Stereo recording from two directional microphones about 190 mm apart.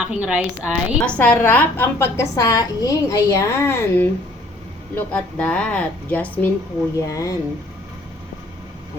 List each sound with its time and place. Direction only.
0.0 s speech: 5° right (ahead or behind)
0.9 s a woman's voice: 5° left (ahead or behind)